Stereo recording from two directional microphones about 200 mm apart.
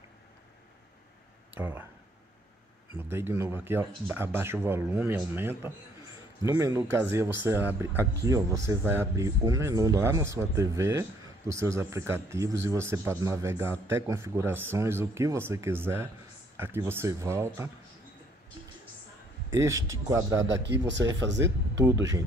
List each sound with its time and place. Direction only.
1.5 s speech: 10° right (ahead or behind)
3.0 s a man's voice: 10° right (ahead or behind)
19.5 s a man's voice: 15° right (ahead or behind)
20.4 s speech: 60° right (ahead or behind)